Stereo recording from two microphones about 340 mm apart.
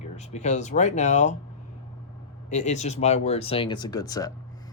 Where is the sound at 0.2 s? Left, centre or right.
Centre.